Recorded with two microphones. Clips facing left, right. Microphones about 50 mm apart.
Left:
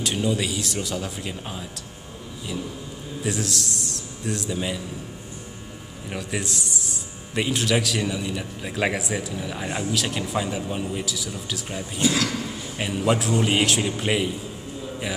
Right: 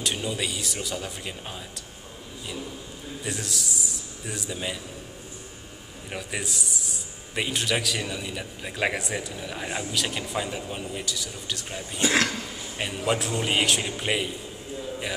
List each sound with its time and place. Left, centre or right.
0.0 s a man's voice: centre
3.3 s a man's voice: centre
6.0 s a man's voice: centre
12.0 s speech: right
12.7 s a man's voice: centre